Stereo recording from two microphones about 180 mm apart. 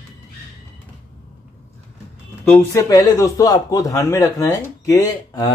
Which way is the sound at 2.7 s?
20° left (ahead or behind).